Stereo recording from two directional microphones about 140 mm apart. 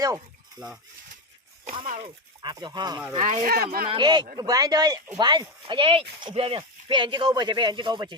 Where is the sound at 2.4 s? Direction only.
30° right (ahead or behind).